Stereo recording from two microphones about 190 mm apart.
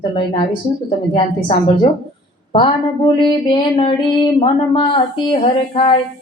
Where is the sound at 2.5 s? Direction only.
25° left (ahead or behind).